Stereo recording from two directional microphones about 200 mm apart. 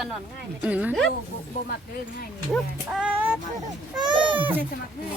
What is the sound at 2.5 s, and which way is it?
Speech, 5° right (ahead or behind).